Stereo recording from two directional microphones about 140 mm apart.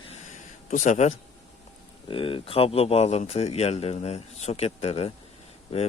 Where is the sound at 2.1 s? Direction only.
40° left (ahead or behind).